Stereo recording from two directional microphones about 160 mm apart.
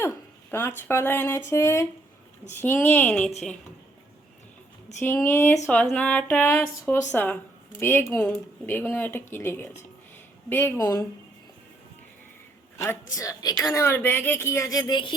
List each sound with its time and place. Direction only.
0.5 s a woman's voice: 15° left (ahead or behind)
5.0 s a woman's voice: 15° left (ahead or behind)
12.7 s a woman's voice: 15° left (ahead or behind)